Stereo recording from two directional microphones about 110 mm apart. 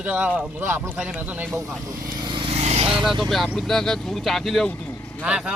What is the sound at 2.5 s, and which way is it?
Vehicle, 80° right.